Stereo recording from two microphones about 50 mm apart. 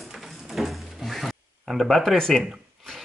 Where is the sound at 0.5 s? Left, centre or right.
Centre.